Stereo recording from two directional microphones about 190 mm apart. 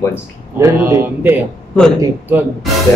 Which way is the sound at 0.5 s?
15° right (ahead or behind).